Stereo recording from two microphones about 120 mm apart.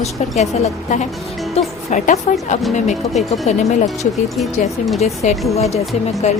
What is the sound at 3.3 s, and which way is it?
Speech, 70° left (ahead or behind).